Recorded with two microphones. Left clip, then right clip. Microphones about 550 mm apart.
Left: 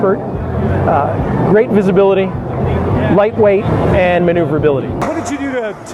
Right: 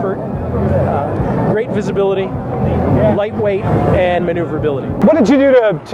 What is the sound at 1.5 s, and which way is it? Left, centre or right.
Speech, left.